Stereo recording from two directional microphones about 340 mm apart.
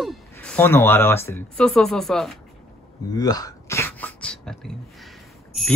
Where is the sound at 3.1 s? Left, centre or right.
Centre.